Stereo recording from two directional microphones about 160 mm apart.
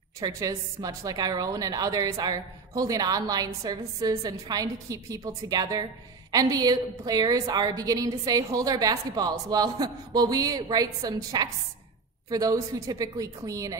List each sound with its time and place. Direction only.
0.2 s a woman's voice: 20° right (ahead or behind)